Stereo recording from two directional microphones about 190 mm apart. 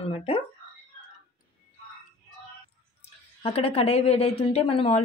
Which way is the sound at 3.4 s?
30° left (ahead or behind).